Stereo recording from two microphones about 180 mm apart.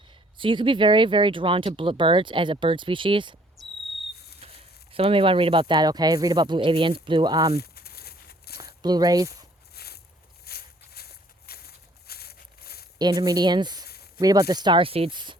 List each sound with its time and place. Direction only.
0.1 s speech: 25° right (ahead or behind)
3.6 s cricket: centre (ahead or behind)
4.1 s cricket: 60° left (ahead or behind)
4.9 s speech: 30° right (ahead or behind)
7.5 s a sound: 60° left (ahead or behind)
8.8 s speech: 20° right (ahead or behind)
9.7 s a sound: 60° left (ahead or behind)
10.4 s walk: 60° left (ahead or behind)
13.0 s speech: 20° right (ahead or behind)
13.8 s a sound: 60° left (ahead or behind)
14.2 s speech: 20° right (ahead or behind)